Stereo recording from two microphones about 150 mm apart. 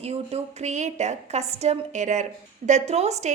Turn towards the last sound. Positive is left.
turn(degrees=-50)  # may be behind; listen again after turning